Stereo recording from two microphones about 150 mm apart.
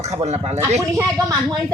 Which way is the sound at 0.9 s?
20° right (ahead or behind).